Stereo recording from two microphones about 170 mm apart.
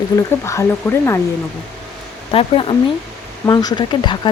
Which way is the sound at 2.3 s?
30° left (ahead or behind).